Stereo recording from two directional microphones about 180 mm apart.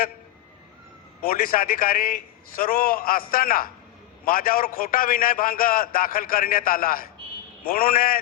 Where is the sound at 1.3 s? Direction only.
50° left (ahead or behind).